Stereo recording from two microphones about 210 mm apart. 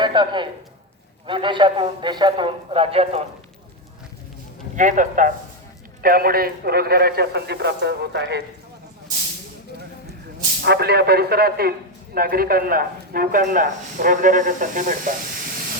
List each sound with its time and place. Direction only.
0.0 s a man's voice: 20° right (ahead or behind)
4.8 s a man's voice: 35° right (ahead or behind); by 8.4 s 55° right (ahead or behind)
10.6 s a man's voice: 50° right (ahead or behind)